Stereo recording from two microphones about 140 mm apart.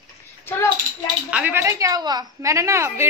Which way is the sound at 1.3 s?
15° right (ahead or behind).